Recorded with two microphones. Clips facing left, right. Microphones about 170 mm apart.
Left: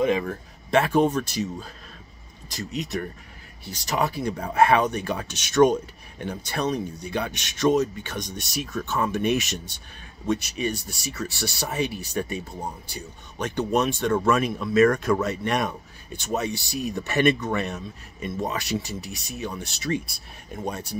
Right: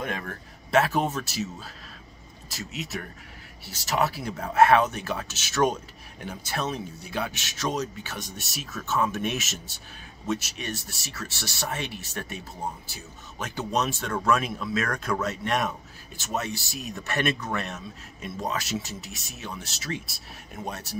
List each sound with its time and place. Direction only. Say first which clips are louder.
0.0 s speech: left 10 dB; 5° left (ahead or behind)